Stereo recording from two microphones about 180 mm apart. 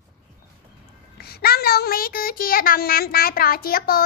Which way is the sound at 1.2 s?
60° left (ahead or behind).